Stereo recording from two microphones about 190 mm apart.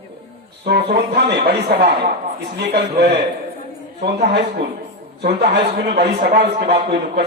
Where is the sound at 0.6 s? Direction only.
60° right (ahead or behind).